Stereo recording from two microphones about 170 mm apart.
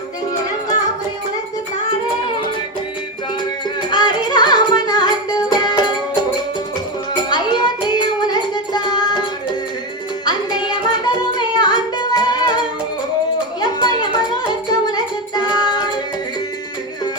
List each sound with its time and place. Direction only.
3.8 s music: 25° left (ahead or behind)
7.3 s music: 25° left (ahead or behind)
10.2 s music: 25° left (ahead or behind)
13.6 s music: 25° left (ahead or behind)